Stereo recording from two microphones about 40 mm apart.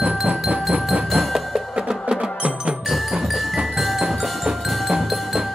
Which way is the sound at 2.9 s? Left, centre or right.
Centre.